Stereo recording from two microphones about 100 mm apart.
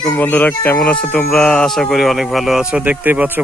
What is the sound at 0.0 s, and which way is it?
Speech, 20° left (ahead or behind).